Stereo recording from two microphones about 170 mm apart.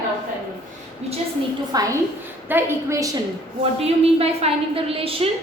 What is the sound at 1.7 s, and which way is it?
A woman's voice, 20° right (ahead or behind).